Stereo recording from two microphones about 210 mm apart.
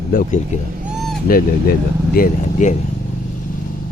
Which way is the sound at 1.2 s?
45° left (ahead or behind).